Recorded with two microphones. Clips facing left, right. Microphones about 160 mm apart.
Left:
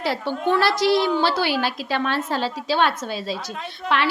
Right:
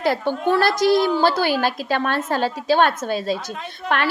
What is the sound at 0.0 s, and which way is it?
A woman's voice, 50° right (ahead or behind).